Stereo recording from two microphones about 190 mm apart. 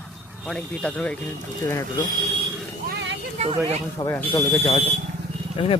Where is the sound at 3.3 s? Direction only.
35° right (ahead or behind).